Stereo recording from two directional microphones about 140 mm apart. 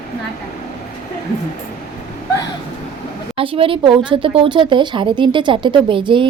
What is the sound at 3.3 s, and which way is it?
Speech, 40° right (ahead or behind).